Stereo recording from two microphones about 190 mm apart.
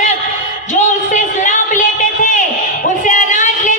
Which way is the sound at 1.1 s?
40° left (ahead or behind).